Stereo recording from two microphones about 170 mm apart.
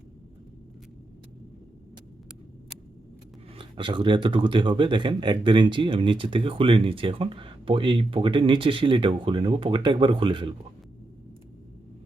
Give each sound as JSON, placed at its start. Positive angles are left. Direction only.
{"t": 3.5, "sound": "speech", "side_deg": -30}